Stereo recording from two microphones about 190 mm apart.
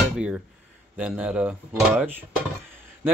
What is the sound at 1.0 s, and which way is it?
Speech, 5° right (ahead or behind).